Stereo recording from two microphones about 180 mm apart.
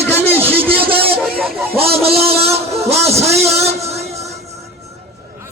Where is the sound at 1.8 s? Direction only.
35° right (ahead or behind).